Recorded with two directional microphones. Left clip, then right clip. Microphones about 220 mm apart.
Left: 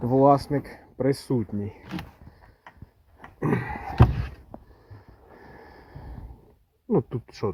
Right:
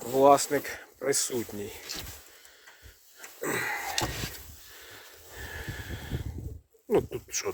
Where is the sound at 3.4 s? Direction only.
15° right (ahead or behind).